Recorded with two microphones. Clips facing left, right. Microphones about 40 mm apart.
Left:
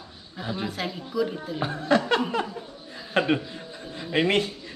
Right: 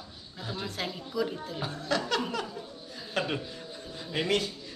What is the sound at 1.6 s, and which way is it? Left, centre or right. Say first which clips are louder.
A man's voice: left 8 dB; left.